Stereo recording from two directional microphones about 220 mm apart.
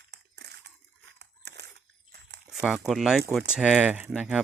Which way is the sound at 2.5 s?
5° right (ahead or behind).